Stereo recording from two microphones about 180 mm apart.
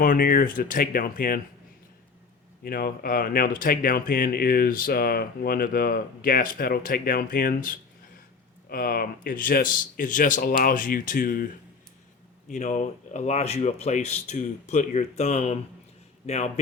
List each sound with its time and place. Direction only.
0.0 s speech: 50° left (ahead or behind)
2.6 s speech: 55° left (ahead or behind)
12.5 s a man's voice: 40° left (ahead or behind)